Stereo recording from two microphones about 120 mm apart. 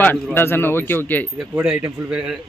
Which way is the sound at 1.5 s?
15° right (ahead or behind).